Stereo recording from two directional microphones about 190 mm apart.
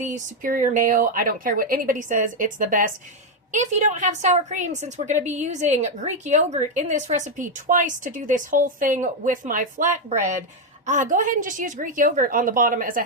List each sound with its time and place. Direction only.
0.0 s a woman's voice: 40° right (ahead or behind)